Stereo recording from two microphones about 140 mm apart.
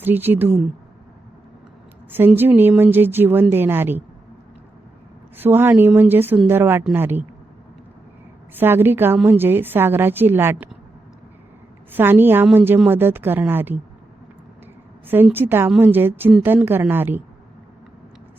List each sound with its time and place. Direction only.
0.0 s a woman's voice: 15° right (ahead or behind)
2.1 s a woman's voice: 15° right (ahead or behind)
5.4 s a woman's voice: 15° right (ahead or behind)
8.5 s a woman's voice: 15° right (ahead or behind)
11.9 s a woman's voice: 15° right (ahead or behind)
15.0 s a woman's voice: 15° right (ahead or behind)